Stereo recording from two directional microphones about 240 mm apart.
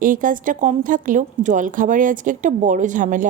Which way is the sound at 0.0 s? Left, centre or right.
Right.